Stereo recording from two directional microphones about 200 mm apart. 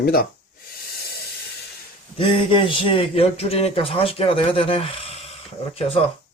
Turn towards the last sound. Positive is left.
turn(degrees=25)  # may be behind; listen again after turning